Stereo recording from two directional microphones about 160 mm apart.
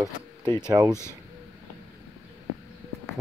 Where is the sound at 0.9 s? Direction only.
15° left (ahead or behind).